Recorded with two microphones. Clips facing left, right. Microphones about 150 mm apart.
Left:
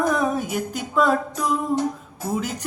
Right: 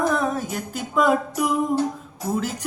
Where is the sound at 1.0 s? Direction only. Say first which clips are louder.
Right 1 dB; 10° right (ahead or behind).